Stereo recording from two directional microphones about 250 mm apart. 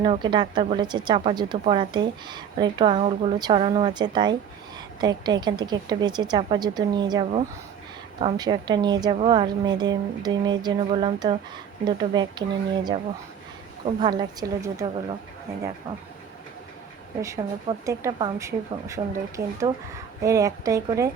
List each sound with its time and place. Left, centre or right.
0.0 s speech: centre
17.2 s speech: centre
19.4 s speech: right
20.2 s speech: centre